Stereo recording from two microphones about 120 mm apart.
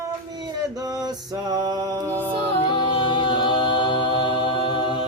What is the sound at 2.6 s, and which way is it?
A capella, 40° left (ahead or behind).